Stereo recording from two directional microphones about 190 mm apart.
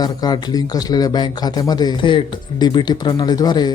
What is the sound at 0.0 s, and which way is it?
A man's voice, 20° left (ahead or behind).